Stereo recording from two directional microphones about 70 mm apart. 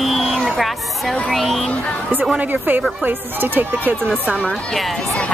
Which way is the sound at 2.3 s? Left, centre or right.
Right.